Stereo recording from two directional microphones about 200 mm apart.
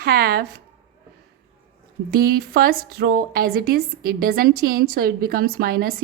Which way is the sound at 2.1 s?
50° right (ahead or behind).